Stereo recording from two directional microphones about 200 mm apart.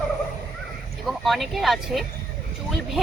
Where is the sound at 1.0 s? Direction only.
Centre (ahead or behind).